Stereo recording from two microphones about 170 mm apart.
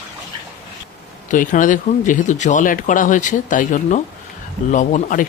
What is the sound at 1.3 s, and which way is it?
Speech, 50° left (ahead or behind).